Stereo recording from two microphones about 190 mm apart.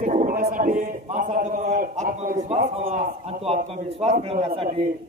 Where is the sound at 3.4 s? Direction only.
30° right (ahead or behind).